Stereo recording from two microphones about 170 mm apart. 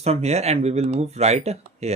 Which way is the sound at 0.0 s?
40° right (ahead or behind).